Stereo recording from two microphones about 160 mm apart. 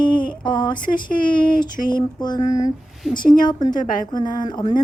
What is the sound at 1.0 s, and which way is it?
Speech, 60° left (ahead or behind).